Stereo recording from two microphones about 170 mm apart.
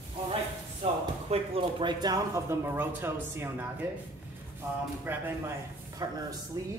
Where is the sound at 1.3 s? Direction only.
30° right (ahead or behind); by 3.6 s 15° right (ahead or behind).